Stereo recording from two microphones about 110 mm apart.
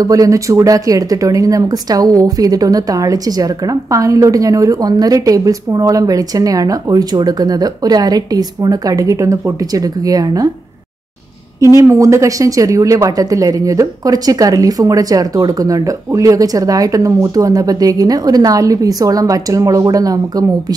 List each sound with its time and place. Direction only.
0.0 s speech: 30° right (ahead or behind)
11.6 s speech: 30° right (ahead or behind)